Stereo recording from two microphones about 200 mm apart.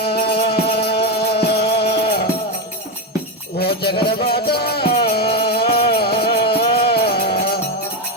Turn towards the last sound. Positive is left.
turn(degrees=50)  # may be behind; listen again after turning